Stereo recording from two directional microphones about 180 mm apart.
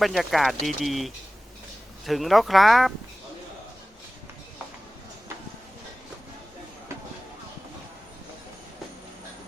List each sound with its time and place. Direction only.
0.0 s speech: centre (ahead or behind)